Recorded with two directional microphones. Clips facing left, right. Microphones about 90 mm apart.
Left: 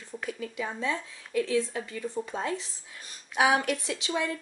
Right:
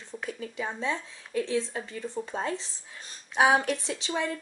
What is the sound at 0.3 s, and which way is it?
Speech, 30° right (ahead or behind).